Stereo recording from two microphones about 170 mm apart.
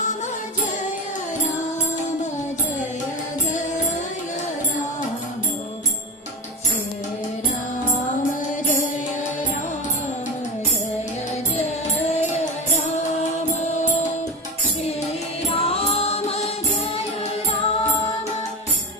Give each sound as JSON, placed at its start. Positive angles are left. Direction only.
{"t": 8.6, "sound": "music", "side_deg": 45}
{"t": 15.4, "sound": "music", "side_deg": 35}